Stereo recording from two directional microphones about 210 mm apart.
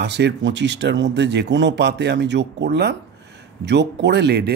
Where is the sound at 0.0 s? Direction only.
55° right (ahead or behind).